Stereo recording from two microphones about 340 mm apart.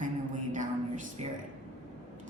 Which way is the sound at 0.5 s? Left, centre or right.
Right.